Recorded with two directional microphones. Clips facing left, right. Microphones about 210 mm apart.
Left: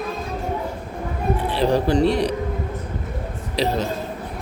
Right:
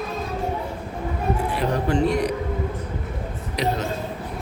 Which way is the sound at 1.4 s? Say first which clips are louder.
Left 8 dB; 30° left (ahead or behind).